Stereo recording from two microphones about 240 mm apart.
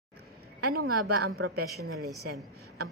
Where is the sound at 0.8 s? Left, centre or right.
Right.